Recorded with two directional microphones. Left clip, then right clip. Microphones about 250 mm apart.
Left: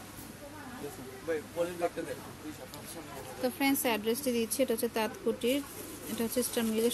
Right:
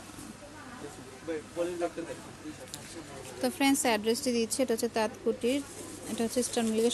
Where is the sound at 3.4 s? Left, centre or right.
Centre.